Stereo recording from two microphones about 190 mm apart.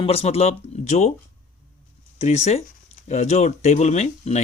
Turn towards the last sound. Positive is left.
turn(degrees=35)  # may be behind; listen again after turning